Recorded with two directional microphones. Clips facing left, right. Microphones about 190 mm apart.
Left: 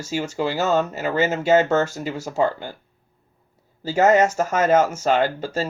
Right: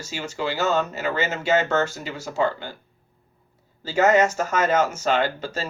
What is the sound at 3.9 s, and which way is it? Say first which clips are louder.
Speech: left 2 dB; 40° left (ahead or behind).